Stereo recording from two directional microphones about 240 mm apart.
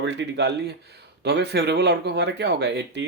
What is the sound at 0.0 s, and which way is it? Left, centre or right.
Speech, right.